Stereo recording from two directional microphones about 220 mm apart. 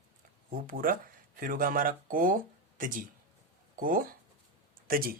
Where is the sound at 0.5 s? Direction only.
40° right (ahead or behind).